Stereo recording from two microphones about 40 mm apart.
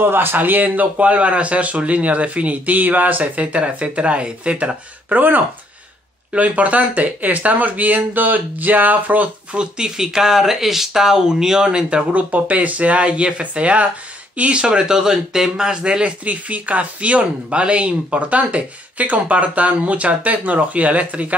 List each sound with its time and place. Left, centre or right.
0.0 s speech: right
6.3 s speech: right
9.5 s speech: right
9.8 s speech: centre
12.1 s speech: right